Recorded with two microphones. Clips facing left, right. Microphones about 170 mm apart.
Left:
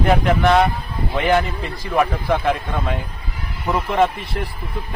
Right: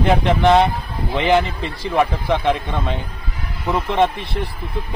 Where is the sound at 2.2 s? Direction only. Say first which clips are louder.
Right 1 dB; 5° left (ahead or behind).